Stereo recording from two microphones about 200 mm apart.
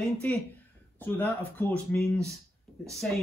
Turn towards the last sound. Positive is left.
turn(degrees=0)  # may be behind; listen again after turning